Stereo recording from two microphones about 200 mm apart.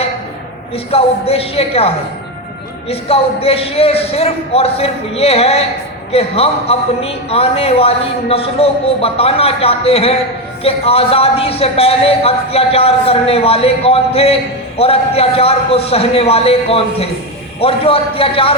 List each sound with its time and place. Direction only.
0.9 s speech: 30° left (ahead or behind)
2.9 s speech: 30° left (ahead or behind)